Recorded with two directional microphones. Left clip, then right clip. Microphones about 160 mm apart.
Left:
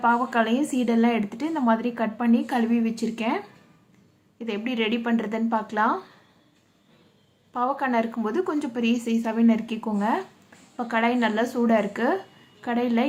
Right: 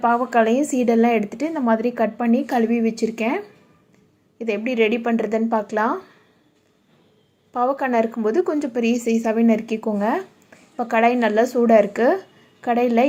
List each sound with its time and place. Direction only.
0.0 s a woman's voice: 20° right (ahead or behind)
7.5 s a woman's voice: 25° right (ahead or behind)